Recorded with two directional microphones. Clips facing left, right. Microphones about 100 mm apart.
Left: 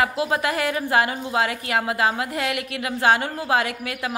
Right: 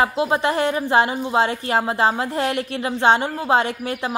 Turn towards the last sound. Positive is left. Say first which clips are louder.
# right 3 dB
turn(degrees=-30)  # may be behind; listen again after turning